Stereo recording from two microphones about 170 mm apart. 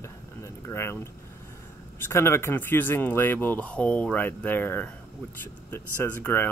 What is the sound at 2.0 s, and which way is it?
Speech, 15° left (ahead or behind).